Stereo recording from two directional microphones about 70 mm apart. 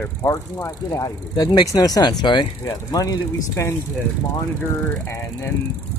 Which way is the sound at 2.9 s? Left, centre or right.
Left.